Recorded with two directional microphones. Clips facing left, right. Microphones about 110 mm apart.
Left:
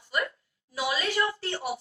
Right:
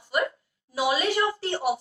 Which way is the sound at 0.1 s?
25° right (ahead or behind).